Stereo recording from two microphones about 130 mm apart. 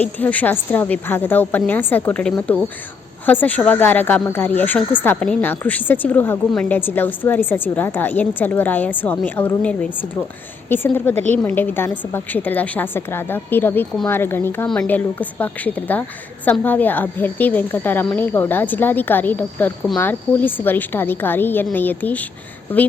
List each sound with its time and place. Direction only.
0.0 s a woman's voice: 10° left (ahead or behind)